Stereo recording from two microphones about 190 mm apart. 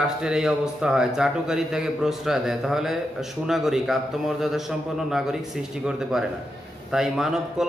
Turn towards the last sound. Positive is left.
turn(degrees=0)  # may be behind; listen again after turning